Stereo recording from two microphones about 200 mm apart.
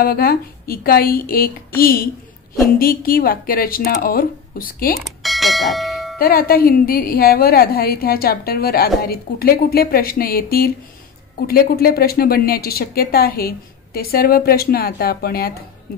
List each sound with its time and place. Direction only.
0.0 s a woman's voice: 50° left (ahead or behind)
5.0 s bell: centre (ahead or behind)
6.1 s a woman's voice: 45° left (ahead or behind)